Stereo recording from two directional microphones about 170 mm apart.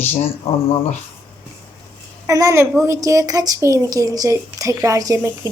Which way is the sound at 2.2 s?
20° right (ahead or behind).